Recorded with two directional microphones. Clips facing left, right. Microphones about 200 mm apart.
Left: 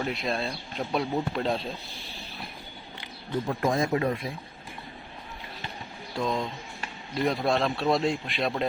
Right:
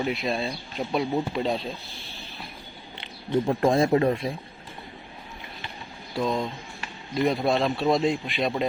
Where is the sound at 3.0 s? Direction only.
30° right (ahead or behind).